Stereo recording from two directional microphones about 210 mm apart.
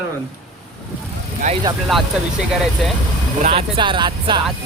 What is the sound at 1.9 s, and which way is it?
Speech, centre (ahead or behind).